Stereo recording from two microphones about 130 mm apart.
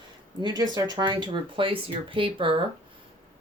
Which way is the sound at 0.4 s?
35° right (ahead or behind).